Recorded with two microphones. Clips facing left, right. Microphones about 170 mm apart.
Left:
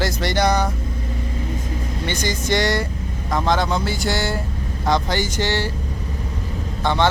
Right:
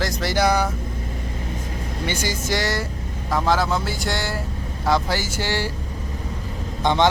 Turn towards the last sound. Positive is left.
turn(degrees=-15)  # may be behind; listen again after turning